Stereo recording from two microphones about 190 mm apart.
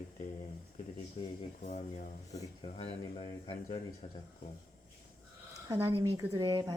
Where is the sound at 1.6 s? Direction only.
40° left (ahead or behind).